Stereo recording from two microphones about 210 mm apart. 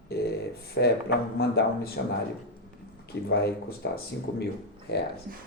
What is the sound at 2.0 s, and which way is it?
Speech, 60° left (ahead or behind).